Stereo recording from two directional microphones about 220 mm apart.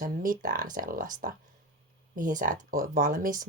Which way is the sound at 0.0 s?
40° right (ahead or behind).